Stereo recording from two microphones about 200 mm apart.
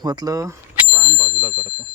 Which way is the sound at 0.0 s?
20° right (ahead or behind).